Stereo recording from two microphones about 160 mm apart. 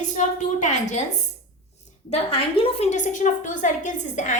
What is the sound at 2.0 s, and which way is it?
A woman's voice, 40° left (ahead or behind).